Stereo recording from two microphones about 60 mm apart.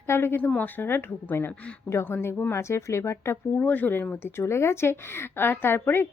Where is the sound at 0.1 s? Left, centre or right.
Left.